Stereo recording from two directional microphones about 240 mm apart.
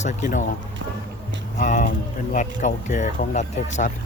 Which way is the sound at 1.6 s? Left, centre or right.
Left.